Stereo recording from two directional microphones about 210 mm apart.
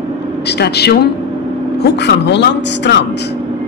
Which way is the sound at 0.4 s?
50° left (ahead or behind).